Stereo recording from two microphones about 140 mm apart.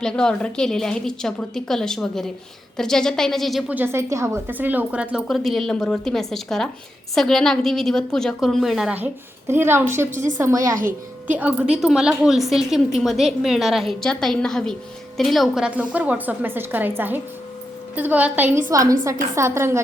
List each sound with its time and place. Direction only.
0.0 s a woman's voice: 5° left (ahead or behind)
3.7 s a woman's voice: 15° right (ahead or behind)
9.5 s a woman's voice: 15° right (ahead or behind)
11.3 s a woman's voice: 10° right (ahead or behind)
18.7 s a woman's voice: 25° right (ahead or behind)